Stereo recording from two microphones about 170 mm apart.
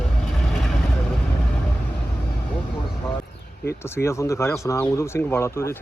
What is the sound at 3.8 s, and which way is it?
Speech, 15° left (ahead or behind).